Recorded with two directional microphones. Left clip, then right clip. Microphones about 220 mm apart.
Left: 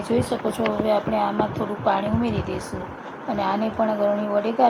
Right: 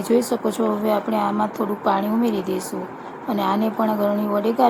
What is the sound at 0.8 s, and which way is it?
A woman's voice, 25° right (ahead or behind).